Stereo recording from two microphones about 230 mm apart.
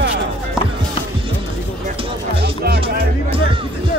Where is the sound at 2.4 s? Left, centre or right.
Right.